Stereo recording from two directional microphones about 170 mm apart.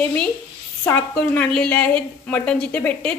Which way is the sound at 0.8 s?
10° left (ahead or behind).